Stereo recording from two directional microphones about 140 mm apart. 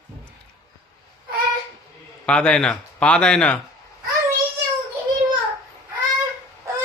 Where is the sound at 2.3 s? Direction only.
10° left (ahead or behind).